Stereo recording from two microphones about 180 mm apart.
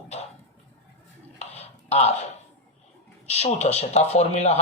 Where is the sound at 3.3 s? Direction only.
35° left (ahead or behind).